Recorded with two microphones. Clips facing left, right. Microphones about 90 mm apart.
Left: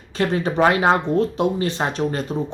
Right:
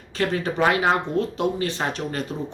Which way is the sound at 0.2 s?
25° left (ahead or behind).